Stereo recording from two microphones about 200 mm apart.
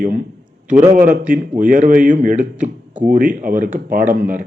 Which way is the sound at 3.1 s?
40° right (ahead or behind).